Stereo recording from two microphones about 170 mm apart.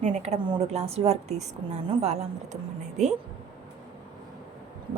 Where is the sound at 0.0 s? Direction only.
40° right (ahead or behind).